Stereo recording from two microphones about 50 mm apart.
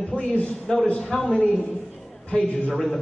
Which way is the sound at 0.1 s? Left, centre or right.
Left.